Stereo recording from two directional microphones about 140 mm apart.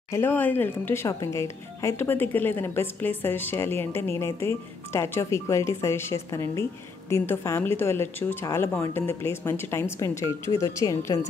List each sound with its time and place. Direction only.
0.1 s speech: 15° left (ahead or behind)